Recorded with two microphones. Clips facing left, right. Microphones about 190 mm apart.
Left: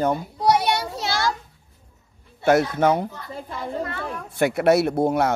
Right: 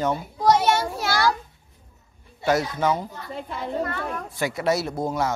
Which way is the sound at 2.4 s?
55° left (ahead or behind).